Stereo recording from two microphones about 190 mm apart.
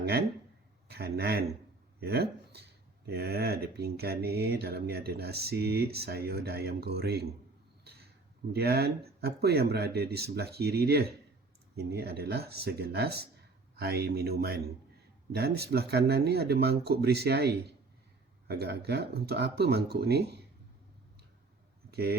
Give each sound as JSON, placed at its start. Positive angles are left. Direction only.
{"t": 0.0, "sound": "speech", "side_deg": -55}
{"t": 8.5, "sound": "speech", "side_deg": -55}
{"t": 21.8, "sound": "a sound", "side_deg": -55}